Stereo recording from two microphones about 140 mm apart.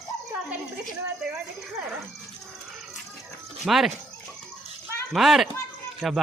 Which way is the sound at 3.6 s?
Centre (ahead or behind).